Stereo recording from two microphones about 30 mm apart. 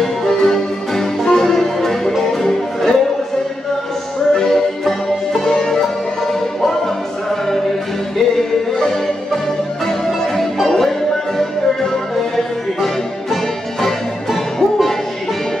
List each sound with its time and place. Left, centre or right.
0.0 s music: centre
4.3 s music: centre
8.4 s music: centre
13.3 s music: centre